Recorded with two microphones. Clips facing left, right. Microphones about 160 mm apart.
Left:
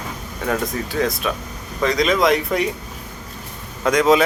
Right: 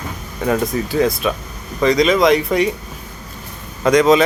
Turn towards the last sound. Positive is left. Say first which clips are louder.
# right 3 dB
turn(degrees=5)  # may be behind; listen again after turning